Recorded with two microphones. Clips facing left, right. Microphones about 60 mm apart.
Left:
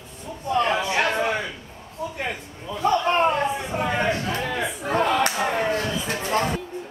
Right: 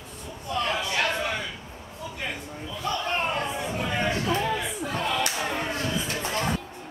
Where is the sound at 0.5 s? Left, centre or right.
Left.